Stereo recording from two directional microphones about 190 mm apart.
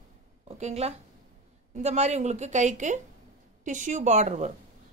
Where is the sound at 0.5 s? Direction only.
35° right (ahead or behind).